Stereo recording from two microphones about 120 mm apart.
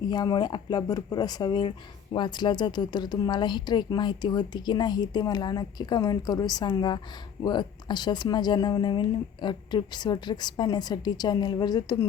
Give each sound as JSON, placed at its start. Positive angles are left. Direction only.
{"t": 0.1, "sound": "speech", "side_deg": 35}